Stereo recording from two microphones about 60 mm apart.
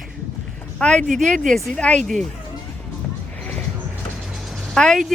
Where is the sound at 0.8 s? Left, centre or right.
Centre.